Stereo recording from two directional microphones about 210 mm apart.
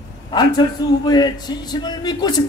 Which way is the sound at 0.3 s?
20° left (ahead or behind).